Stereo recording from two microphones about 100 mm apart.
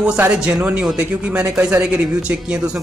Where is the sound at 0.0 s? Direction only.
10° right (ahead or behind).